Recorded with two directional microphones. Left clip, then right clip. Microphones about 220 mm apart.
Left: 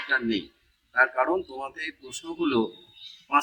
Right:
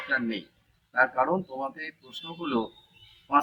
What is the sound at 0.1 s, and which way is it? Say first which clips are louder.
A man's voice: left 3 dB; 15° left (ahead or behind).